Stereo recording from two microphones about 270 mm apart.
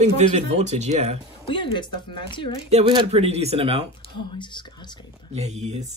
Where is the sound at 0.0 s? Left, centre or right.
Right.